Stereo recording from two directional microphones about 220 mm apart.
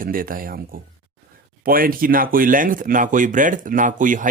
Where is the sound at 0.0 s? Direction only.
40° right (ahead or behind).